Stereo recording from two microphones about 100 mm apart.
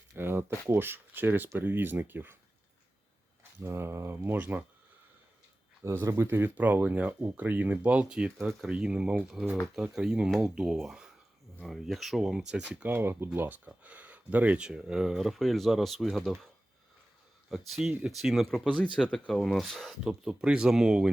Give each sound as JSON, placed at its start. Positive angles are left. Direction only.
{"t": 0.2, "sound": "speech", "side_deg": -20}
{"t": 3.6, "sound": "speech", "side_deg": -25}
{"t": 5.8, "sound": "speech", "side_deg": -25}
{"t": 12.9, "sound": "speech", "side_deg": -25}
{"t": 17.5, "sound": "speech", "side_deg": 0}